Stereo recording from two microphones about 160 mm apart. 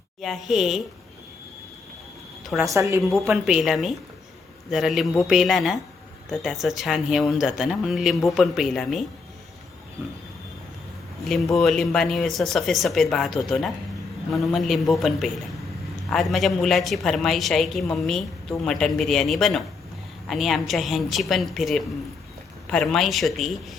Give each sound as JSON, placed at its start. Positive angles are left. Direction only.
{"t": 0.2, "sound": "a woman's voice", "side_deg": 0}
{"t": 2.6, "sound": "a woman's voice", "side_deg": -20}
{"t": 3.2, "sound": "a woman's voice", "side_deg": -5}
{"t": 11.3, "sound": "a woman's voice", "side_deg": 0}